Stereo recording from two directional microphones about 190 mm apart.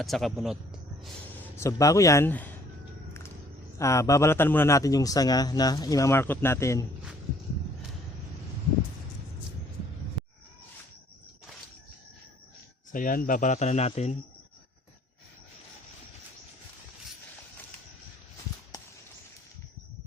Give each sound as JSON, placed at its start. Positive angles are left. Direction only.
{"t": 0.0, "sound": "speech", "side_deg": 0}
{"t": 1.5, "sound": "a man's voice", "side_deg": 15}
{"t": 3.8, "sound": "a man's voice", "side_deg": 15}
{"t": 12.9, "sound": "speech", "side_deg": 45}